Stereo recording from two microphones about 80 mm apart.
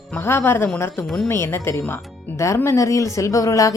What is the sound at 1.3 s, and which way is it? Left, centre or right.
Speech, left.